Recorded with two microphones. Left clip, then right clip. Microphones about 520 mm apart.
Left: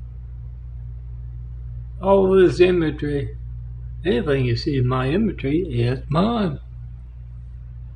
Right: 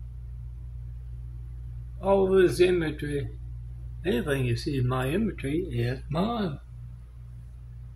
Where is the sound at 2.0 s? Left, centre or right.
Right.